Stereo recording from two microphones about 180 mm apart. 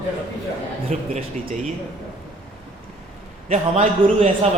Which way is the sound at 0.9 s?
40° right (ahead or behind).